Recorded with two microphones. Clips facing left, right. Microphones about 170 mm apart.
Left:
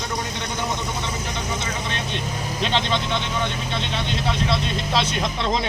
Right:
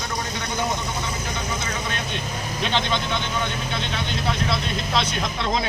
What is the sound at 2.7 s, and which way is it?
Speech, centre (ahead or behind).